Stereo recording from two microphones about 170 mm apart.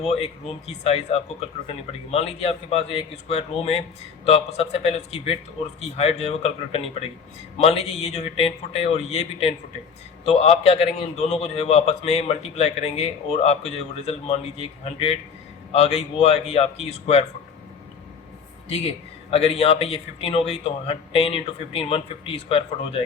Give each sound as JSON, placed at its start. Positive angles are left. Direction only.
{"t": 0.0, "sound": "a man's voice", "side_deg": 40}
{"t": 10.6, "sound": "a man's voice", "side_deg": 40}
{"t": 18.7, "sound": "a man's voice", "side_deg": 35}